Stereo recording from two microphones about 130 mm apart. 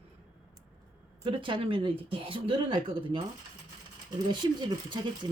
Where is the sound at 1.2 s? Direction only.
40° right (ahead or behind).